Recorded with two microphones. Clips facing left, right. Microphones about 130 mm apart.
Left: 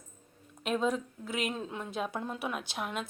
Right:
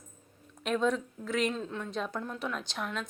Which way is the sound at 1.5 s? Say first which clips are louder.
Right 1 dB; 15° left (ahead or behind).